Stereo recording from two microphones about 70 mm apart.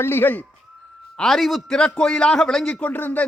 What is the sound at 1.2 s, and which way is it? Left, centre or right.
Speech, centre.